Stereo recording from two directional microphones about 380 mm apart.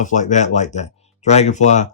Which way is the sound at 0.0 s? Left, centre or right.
Centre.